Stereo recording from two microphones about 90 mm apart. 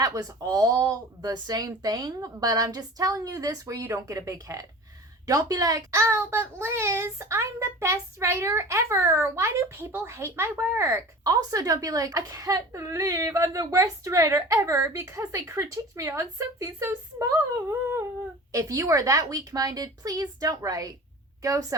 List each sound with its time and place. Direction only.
0.0 s a child's voice: 40° right (ahead or behind)